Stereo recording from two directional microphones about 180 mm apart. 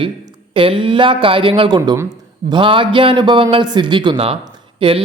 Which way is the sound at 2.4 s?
30° right (ahead or behind).